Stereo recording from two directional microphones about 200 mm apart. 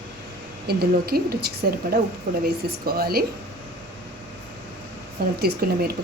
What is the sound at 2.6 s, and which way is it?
Speech, 50° right (ahead or behind).